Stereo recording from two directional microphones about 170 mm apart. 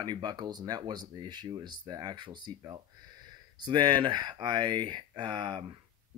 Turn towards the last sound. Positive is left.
turn(degrees=-30)  # may be behind; listen again after turning